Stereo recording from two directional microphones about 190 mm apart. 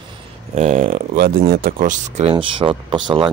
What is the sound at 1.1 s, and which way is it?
Speech, 55° right (ahead or behind).